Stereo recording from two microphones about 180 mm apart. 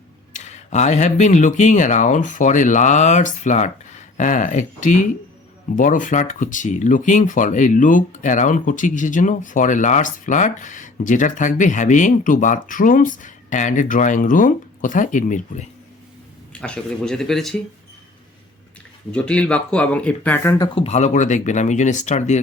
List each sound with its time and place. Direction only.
0.3 s speech: 40° left (ahead or behind)
16.5 s speech: 5° left (ahead or behind)
19.1 s speech: 5° left (ahead or behind)
20.7 s speech: 35° left (ahead or behind)